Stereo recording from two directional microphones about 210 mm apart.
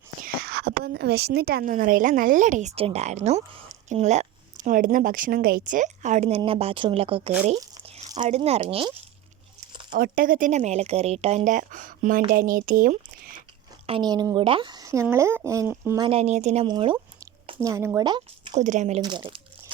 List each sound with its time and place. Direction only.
0.3 s a woman's voice: 50° right (ahead or behind); by 8.9 s 25° right (ahead or behind)
9.9 s a woman's voice: 40° right (ahead or behind)
13.8 s speech: 20° right (ahead or behind)
16.0 s a woman's voice: 30° right (ahead or behind)
18.5 s a woman's voice: 35° right (ahead or behind)
19.0 s crumpling: 20° right (ahead or behind)